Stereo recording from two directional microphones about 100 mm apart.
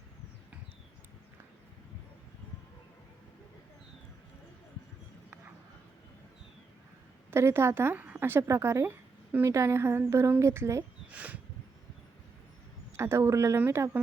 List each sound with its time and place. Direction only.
7.3 s a woman's voice: 25° right (ahead or behind)
11.1 s a sound: 15° right (ahead or behind)
13.0 s a woman's voice: 25° right (ahead or behind)